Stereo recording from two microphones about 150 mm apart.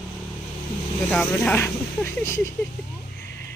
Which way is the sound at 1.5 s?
15° left (ahead or behind).